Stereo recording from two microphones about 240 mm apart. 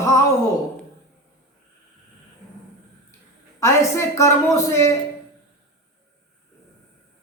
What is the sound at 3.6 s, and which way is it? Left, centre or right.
A woman's voice, centre.